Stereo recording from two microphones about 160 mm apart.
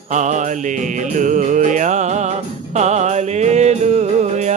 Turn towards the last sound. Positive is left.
turn(degrees=-45)  # may be behind; listen again after turning